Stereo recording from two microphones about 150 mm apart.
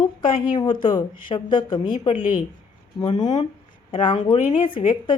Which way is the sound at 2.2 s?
65° left (ahead or behind).